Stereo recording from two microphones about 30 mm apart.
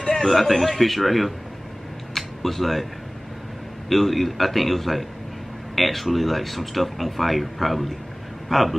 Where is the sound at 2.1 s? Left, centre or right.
Centre.